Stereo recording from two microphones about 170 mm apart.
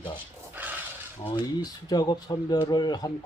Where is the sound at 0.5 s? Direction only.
10° right (ahead or behind).